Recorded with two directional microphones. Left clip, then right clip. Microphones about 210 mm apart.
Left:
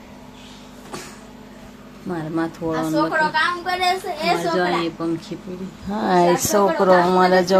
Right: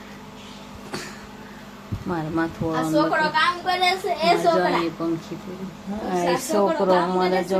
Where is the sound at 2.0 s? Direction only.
5° left (ahead or behind).